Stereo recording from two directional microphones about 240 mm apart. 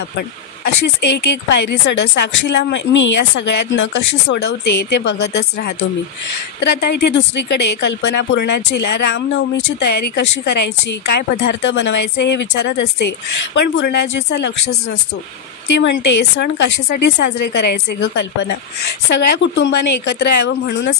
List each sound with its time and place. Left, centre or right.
1.3 s a woman's voice: left
15.8 s a woman's voice: left